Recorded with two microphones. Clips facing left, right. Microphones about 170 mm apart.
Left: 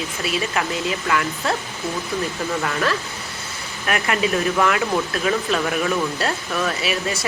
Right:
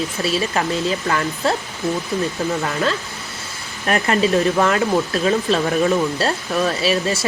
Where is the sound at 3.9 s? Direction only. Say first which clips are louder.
Right 4 dB; 35° right (ahead or behind).